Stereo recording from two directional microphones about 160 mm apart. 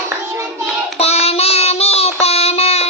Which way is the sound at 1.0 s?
40° left (ahead or behind).